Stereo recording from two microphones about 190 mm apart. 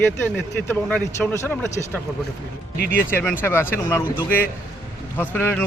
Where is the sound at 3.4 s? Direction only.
10° left (ahead or behind).